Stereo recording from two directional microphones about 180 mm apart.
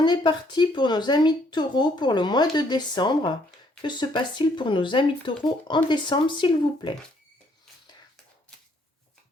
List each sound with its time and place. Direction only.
0.0 s speech: 25° left (ahead or behind)